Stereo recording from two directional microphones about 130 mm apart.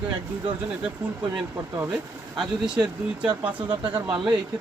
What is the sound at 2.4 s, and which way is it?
Speech, 5° right (ahead or behind).